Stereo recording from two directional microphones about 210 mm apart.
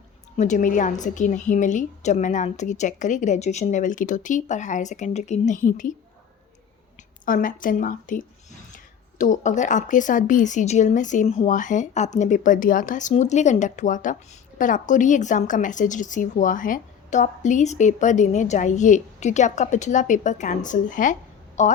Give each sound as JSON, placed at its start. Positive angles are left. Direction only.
{"t": 0.3, "sound": "a woman's voice", "side_deg": 35}
{"t": 7.3, "sound": "a woman's voice", "side_deg": 40}